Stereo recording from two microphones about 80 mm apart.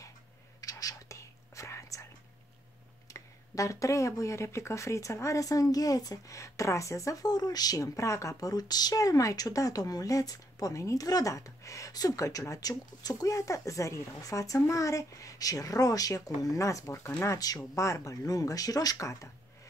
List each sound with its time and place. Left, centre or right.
0.6 s whispering: left
3.1 s speech: left